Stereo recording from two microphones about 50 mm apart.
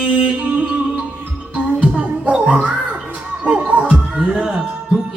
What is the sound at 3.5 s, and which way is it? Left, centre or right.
Music, right.